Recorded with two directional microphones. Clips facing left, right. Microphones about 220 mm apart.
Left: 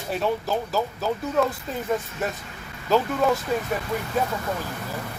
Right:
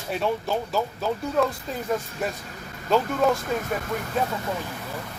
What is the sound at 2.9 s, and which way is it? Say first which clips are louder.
Speech: left 1 dB; centre (ahead or behind).